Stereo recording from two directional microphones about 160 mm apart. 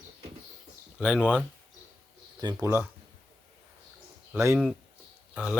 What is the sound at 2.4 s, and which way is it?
Speech, 30° right (ahead or behind).